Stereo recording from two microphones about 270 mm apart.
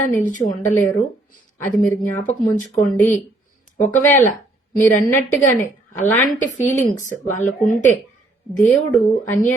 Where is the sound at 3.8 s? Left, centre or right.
Centre.